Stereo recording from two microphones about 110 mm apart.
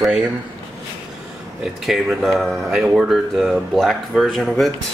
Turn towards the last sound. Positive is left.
turn(degrees=0)  # may be behind; listen again after turning